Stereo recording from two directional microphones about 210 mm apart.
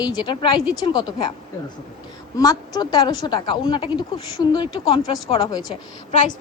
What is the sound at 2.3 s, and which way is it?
A woman's voice, 15° left (ahead or behind).